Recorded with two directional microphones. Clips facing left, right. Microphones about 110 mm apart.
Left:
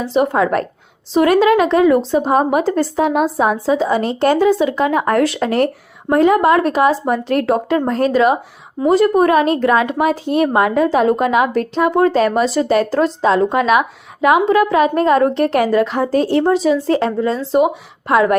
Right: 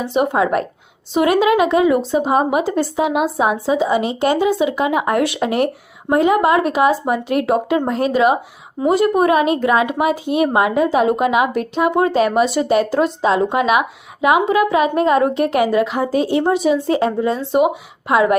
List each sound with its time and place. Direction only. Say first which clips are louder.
0.0 s speech: left 1 dB; 15° right (ahead or behind)
11.5 s speech: left 3 dB; 40° left (ahead or behind)
11.9 s speech: left 1 dB; 20° right (ahead or behind)
16.1 s speech: left 2 dB; 45° left (ahead or behind)
16.6 s speech: left 1 dB; 20° right (ahead or behind)